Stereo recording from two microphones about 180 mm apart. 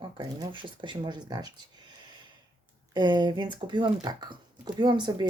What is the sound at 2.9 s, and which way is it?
Speech, 25° right (ahead or behind).